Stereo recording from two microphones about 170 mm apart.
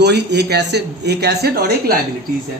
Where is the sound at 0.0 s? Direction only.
80° right.